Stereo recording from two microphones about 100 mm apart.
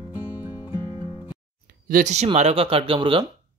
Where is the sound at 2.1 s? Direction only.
85° right; by 3.2 s 60° right (ahead or behind).